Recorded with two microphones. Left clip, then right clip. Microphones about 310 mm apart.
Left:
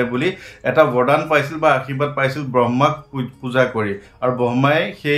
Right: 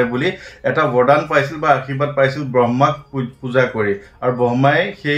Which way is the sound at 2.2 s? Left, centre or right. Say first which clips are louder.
Right 3 dB; centre.